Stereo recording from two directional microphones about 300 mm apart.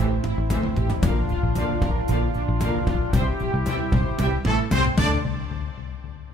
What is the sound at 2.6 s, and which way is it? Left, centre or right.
Music, centre.